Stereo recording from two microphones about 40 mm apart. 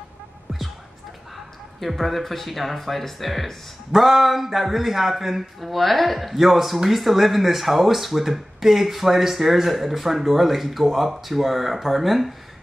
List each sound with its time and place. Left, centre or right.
1.8 s speech: centre